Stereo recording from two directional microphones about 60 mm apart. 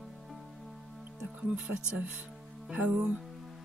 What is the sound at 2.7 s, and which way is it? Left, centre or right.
Music, right.